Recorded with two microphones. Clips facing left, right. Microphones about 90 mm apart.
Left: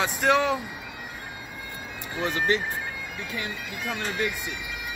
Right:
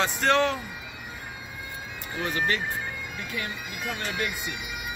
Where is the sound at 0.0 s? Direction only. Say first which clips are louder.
Even; 10° left (ahead or behind).